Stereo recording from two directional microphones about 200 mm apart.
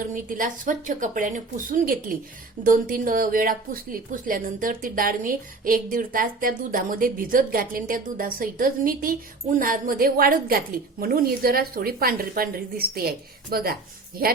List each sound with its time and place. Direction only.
0.0 s a woman's voice: 45° right (ahead or behind)